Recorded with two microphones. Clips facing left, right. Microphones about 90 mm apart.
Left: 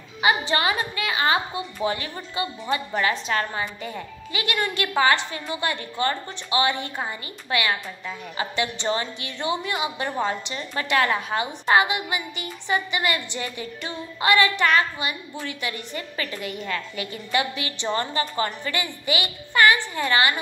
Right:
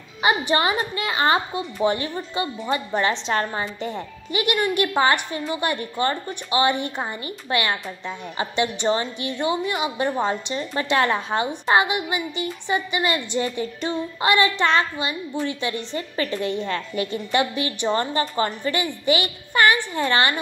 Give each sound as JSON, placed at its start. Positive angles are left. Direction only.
{"t": 0.2, "sound": "a woman's voice", "side_deg": -25}
{"t": 7.1, "sound": "a woman's voice", "side_deg": -30}